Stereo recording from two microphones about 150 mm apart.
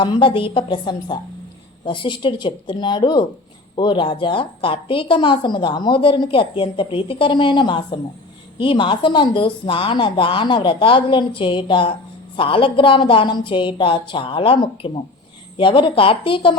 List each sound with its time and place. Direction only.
0.0 s a woman's voice: 35° left (ahead or behind)